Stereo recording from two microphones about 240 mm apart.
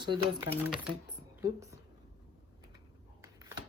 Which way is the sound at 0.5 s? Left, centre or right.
Centre.